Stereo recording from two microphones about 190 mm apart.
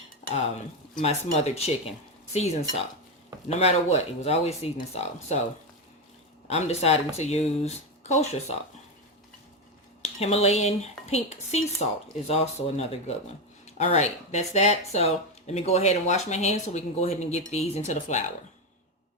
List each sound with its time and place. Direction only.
1.0 s speech: 35° left (ahead or behind)
6.5 s speech: 35° left (ahead or behind)
10.0 s speech: 35° left (ahead or behind)